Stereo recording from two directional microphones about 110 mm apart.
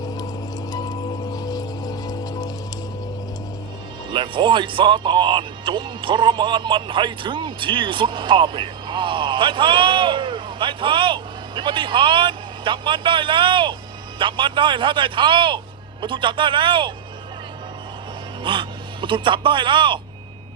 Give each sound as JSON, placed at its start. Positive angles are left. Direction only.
{"t": 0.7, "sound": "music", "side_deg": 35}
{"t": 4.1, "sound": "speech", "side_deg": -50}
{"t": 18.4, "sound": "speech", "side_deg": -50}